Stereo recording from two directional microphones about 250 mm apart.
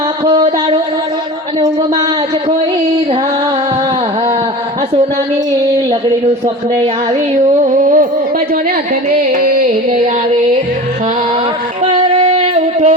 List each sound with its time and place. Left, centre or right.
0.3 s a sound: centre
7.3 s music: right
9.0 s music: right
11.9 s singing: right